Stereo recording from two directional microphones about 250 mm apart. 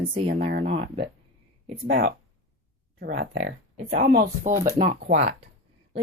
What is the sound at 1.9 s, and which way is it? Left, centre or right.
Speech, right.